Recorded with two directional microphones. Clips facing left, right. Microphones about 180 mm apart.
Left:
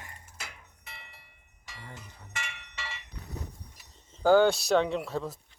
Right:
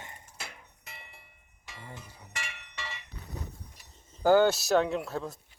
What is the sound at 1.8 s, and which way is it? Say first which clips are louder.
Chink: right 1 dB; 10° right (ahead or behind).